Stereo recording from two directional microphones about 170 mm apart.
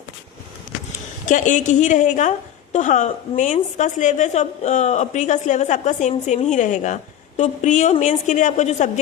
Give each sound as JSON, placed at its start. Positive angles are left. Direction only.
{"t": 1.2, "sound": "a woman's voice", "side_deg": 45}